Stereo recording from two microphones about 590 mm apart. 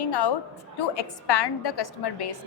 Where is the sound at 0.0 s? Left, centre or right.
Left.